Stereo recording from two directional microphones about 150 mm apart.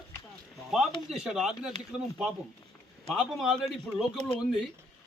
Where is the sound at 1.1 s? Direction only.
5° right (ahead or behind).